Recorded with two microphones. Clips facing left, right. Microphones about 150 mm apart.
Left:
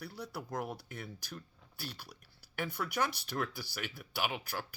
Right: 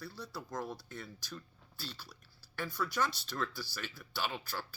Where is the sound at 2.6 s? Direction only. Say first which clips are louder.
Even; 60° left (ahead or behind).